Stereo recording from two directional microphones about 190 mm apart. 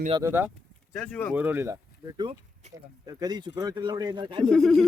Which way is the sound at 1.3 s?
10° right (ahead or behind).